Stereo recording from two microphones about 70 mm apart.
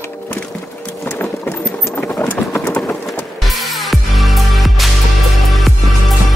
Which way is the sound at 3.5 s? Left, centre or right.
Centre.